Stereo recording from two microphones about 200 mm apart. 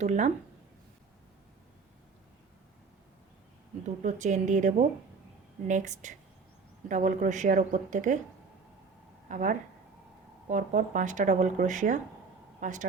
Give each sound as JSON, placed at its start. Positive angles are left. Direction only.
{"t": 0.0, "sound": "speech", "side_deg": -35}
{"t": 3.8, "sound": "speech", "side_deg": -35}
{"t": 9.3, "sound": "speech", "side_deg": -40}